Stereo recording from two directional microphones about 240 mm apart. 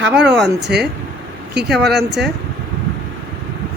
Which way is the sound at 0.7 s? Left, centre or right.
Right.